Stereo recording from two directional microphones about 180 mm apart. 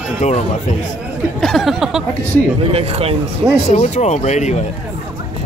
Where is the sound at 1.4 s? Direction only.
Centre (ahead or behind).